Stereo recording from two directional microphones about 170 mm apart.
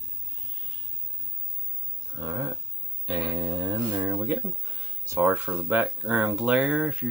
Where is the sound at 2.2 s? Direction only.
25° right (ahead or behind).